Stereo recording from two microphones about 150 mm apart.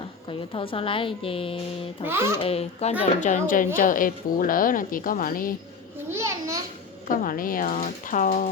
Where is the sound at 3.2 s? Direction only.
60° left (ahead or behind).